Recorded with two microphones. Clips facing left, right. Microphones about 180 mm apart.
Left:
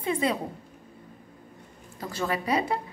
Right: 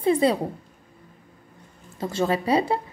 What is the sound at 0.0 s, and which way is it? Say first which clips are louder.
Speech: right 7 dB; 35° right (ahead or behind).